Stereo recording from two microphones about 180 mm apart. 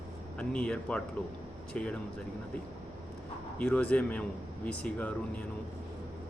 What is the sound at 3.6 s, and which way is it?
Speech, 10° left (ahead or behind).